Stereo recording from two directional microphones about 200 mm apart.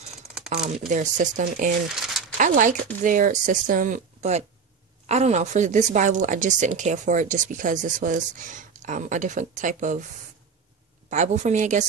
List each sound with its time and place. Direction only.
0.7 s a woman's voice: 40° right (ahead or behind)
11.1 s a woman's voice: 35° right (ahead or behind)